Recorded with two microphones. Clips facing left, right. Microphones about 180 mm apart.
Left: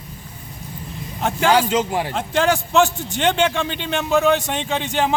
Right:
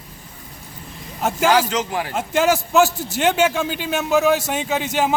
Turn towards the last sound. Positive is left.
turn(degrees=-5)  # may be behind; listen again after turning